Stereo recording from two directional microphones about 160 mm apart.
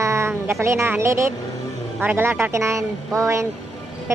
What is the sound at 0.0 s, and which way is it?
A woman's voice, 15° right (ahead or behind).